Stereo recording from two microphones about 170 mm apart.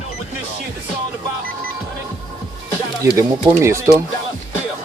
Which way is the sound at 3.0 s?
15° right (ahead or behind).